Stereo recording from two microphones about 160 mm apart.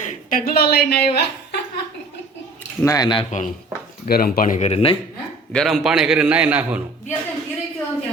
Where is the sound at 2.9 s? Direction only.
25° left (ahead or behind).